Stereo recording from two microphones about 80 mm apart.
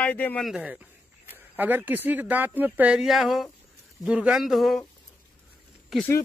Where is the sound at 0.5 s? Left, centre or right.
Centre.